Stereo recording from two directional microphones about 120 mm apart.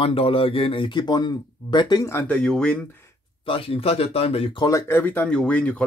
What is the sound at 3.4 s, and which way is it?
Speech, 50° left (ahead or behind).